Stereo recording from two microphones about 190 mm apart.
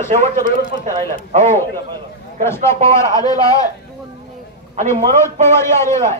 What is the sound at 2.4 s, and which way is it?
A man's voice, 15° left (ahead or behind).